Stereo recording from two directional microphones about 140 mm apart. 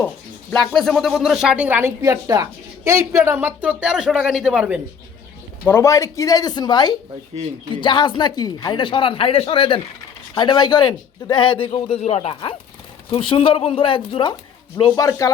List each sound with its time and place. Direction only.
0.5 s speech: 5° left (ahead or behind)
5.6 s speech: 20° left (ahead or behind); by 12.3 s 50° left (ahead or behind)
12.3 s speech: 35° left (ahead or behind)
14.9 s speech: 25° left (ahead or behind)